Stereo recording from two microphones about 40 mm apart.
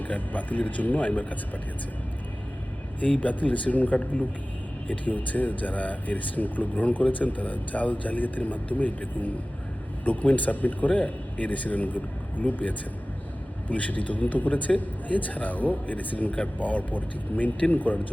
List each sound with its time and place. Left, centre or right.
0.0 s speech: left
3.0 s speech: left